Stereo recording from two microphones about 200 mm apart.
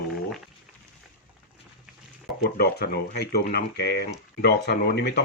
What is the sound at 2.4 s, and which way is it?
Speech, 50° left (ahead or behind).